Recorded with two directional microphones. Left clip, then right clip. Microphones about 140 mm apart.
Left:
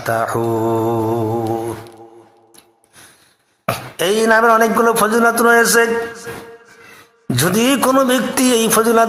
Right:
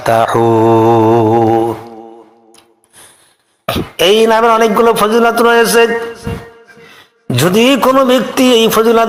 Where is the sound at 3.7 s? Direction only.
Centre (ahead or behind).